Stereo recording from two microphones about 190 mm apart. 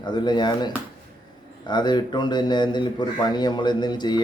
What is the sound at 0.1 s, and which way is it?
Speech, 25° left (ahead or behind).